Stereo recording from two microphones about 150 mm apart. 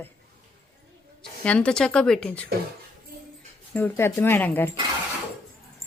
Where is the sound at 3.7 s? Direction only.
15° left (ahead or behind).